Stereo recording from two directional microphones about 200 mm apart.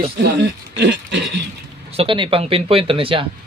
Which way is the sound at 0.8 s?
55° right (ahead or behind).